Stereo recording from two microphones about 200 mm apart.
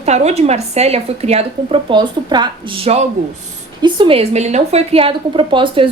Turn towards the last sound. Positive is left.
turn(degrees=-25)  # may be behind; listen again after turning